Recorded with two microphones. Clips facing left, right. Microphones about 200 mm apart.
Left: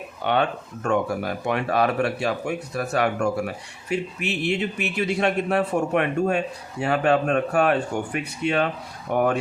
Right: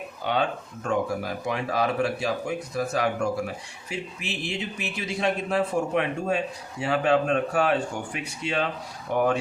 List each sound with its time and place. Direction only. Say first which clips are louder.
0.3 s speech: left 3 dB; 65° left (ahead or behind)